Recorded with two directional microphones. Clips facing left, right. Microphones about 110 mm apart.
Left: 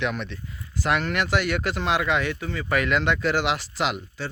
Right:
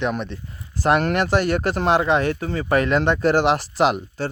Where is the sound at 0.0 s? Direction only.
40° right (ahead or behind).